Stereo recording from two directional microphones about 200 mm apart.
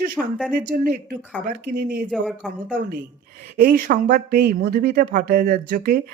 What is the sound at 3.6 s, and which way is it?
Speech, 45° right (ahead or behind).